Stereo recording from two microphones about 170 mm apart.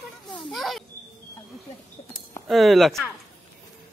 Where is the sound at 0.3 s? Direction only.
Centre (ahead or behind).